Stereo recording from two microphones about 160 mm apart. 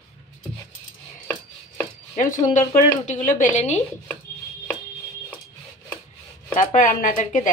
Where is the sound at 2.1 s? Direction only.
55° left (ahead or behind).